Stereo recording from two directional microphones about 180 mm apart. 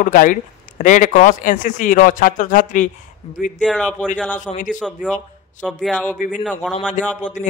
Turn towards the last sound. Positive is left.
turn(degrees=45)  # may be behind; listen again after turning